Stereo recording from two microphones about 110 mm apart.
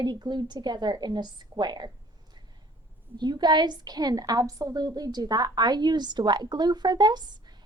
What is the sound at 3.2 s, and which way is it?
A woman's voice, 40° right (ahead or behind).